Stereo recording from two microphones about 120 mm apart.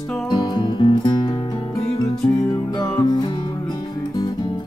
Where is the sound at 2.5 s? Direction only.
30° left (ahead or behind).